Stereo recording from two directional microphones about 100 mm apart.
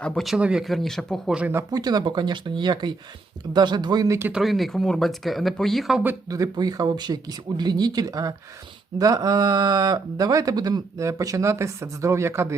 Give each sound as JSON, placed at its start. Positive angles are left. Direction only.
{"t": 0.0, "sound": "speech", "side_deg": 10}
{"t": 0.3, "sound": "speech", "side_deg": -10}
{"t": 1.3, "sound": "speech", "side_deg": -10}
{"t": 1.7, "sound": "speech", "side_deg": -40}
{"t": 4.3, "sound": "speech", "side_deg": -5}
{"t": 6.2, "sound": "speech", "side_deg": -35}